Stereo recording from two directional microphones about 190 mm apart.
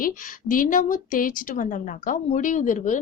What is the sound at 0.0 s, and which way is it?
A woman's voice, 45° left (ahead or behind).